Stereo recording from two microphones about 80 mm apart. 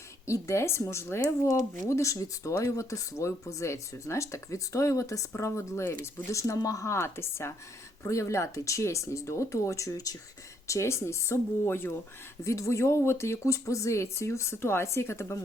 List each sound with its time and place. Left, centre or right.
0.3 s speech: left